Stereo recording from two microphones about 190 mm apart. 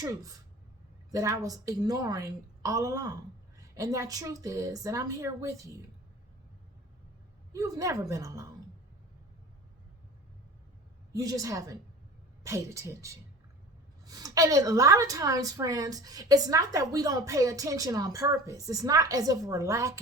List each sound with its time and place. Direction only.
1.1 s a woman's voice: 15° right (ahead or behind)
7.5 s a woman's voice: 15° right (ahead or behind)
11.1 s a woman's voice: 20° right (ahead or behind)